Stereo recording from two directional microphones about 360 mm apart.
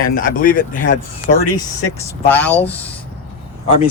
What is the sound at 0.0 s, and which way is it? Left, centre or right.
Speech, left.